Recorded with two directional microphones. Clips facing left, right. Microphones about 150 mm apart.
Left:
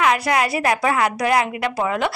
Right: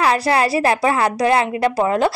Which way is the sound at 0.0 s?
30° right (ahead or behind).